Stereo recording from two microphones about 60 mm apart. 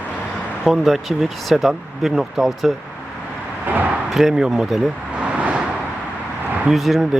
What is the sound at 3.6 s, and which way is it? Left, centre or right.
Speech, right.